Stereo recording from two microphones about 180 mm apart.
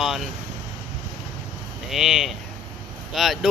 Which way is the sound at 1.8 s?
Centre (ahead or behind).